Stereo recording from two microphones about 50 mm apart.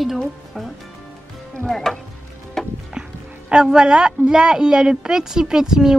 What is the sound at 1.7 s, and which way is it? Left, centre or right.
Speech, centre.